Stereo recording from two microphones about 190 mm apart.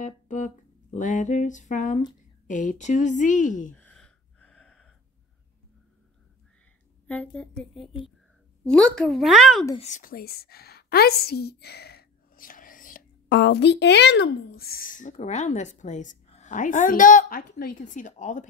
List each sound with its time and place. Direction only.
0.0 s music: 40° left (ahead or behind)
0.9 s a woman's voice: 40° left (ahead or behind)
3.7 s gasp: 5° left (ahead or behind)
7.1 s a child's voice: 5° left (ahead or behind)
9.8 s a woman's voice: 40° left (ahead or behind)
13.3 s speech: 65° left (ahead or behind); by 18.5 s 40° left (ahead or behind)